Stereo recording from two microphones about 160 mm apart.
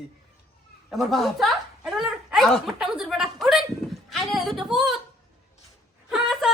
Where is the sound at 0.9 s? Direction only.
Centre (ahead or behind).